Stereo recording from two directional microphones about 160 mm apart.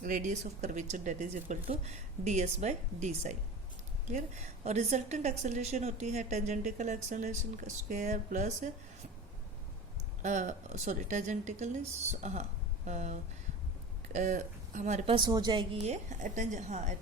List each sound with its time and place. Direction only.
0.0 s a woman's voice: 50° right (ahead or behind)
10.2 s a woman's voice: 50° right (ahead or behind)
15.1 s a woman's voice: 25° right (ahead or behind)
15.8 s a woman's voice: 45° right (ahead or behind)